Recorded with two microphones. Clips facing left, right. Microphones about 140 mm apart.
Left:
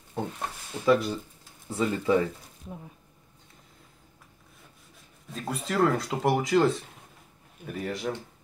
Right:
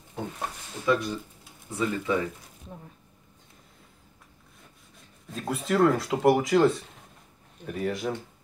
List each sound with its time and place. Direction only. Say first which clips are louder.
0.8 s speech: left 3 dB; 30° left (ahead or behind)
5.3 s speech: right 3 dB; centre (ahead or behind)